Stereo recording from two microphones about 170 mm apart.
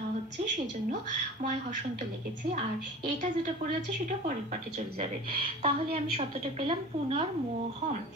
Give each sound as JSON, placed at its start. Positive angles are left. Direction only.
{"t": 5.6, "sound": "a woman's voice", "side_deg": -35}